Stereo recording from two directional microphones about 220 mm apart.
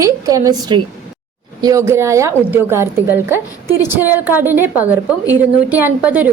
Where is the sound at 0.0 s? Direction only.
15° right (ahead or behind).